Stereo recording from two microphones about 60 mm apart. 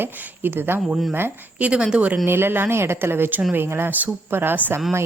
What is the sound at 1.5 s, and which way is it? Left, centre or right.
Speech, right.